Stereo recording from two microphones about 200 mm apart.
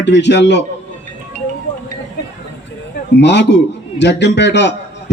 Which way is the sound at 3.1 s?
60° left (ahead or behind).